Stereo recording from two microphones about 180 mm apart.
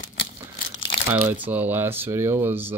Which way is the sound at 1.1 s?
10° right (ahead or behind).